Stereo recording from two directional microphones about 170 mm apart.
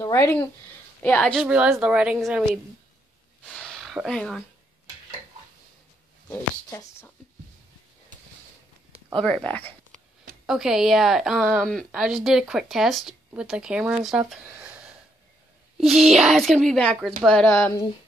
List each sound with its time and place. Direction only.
0.0 s a woman's voice: 15° left (ahead or behind)
1.4 s a woman's voice: 5° right (ahead or behind)
3.4 s a sound: centre (ahead or behind)
6.2 s speech: 15° left (ahead or behind)
9.2 s speech: 5° left (ahead or behind)
10.4 s a woman's voice: 5° right (ahead or behind)
15.8 s a sound: 35° right (ahead or behind)
16.1 s a woman's voice: centre (ahead or behind)